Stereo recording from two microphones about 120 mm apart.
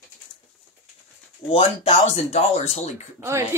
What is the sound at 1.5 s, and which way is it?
Speech, 55° left (ahead or behind).